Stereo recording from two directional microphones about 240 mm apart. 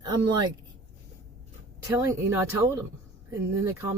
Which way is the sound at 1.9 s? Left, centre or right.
Centre.